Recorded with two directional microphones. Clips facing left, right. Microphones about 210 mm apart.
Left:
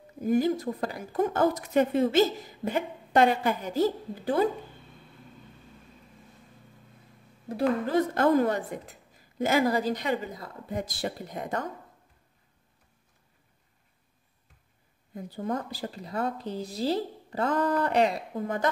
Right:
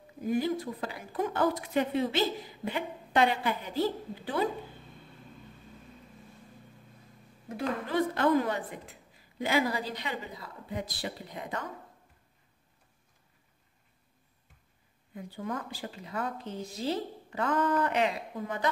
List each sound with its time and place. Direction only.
0.2 s speech: 45° left (ahead or behind)
7.4 s speech: 40° left (ahead or behind)
15.1 s a woman's voice: 40° left (ahead or behind)